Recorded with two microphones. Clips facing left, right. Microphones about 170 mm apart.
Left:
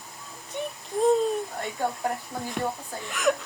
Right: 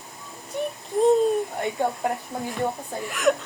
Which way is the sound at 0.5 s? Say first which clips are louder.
Right 4 dB; centre (ahead or behind).